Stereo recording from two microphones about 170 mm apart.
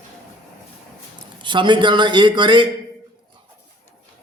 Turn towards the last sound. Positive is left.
turn(degrees=-25)  # may be behind; listen again after turning